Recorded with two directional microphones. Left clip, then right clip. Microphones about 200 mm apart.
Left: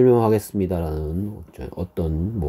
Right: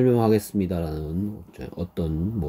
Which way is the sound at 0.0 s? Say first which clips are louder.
Left 4 dB; 20° left (ahead or behind).